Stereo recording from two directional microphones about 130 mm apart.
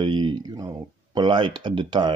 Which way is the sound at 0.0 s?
35° right (ahead or behind).